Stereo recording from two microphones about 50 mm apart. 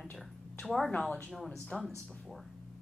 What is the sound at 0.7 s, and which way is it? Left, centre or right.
Speech, centre.